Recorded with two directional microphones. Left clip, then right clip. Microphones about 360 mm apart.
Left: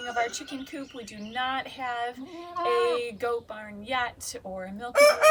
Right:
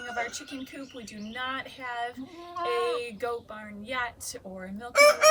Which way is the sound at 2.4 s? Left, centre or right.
Left.